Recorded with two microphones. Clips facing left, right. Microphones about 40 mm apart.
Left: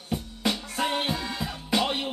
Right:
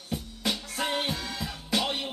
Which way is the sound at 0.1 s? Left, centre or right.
Left.